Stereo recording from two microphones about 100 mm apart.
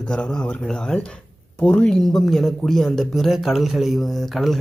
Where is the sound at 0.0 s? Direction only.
10° left (ahead or behind).